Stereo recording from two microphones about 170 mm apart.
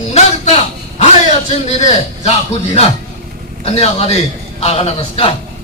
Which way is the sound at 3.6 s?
35° left (ahead or behind).